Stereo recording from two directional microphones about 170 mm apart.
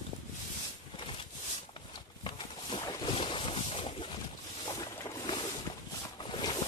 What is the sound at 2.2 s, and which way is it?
Boat, 30° left (ahead or behind).